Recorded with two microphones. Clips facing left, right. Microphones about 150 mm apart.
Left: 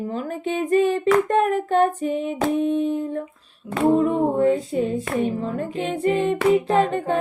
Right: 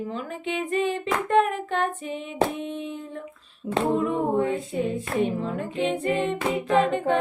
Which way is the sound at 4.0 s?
35° left (ahead or behind).